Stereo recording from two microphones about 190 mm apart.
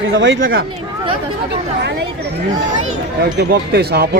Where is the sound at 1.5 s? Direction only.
60° right (ahead or behind).